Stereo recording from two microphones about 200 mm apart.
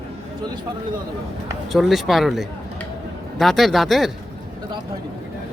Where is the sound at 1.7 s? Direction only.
Centre (ahead or behind).